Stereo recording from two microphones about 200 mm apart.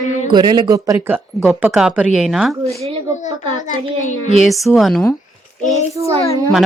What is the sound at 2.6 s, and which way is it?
Speech, 30° right (ahead or behind).